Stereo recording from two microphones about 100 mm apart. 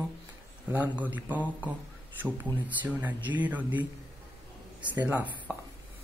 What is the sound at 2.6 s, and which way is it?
A man's voice, 15° right (ahead or behind).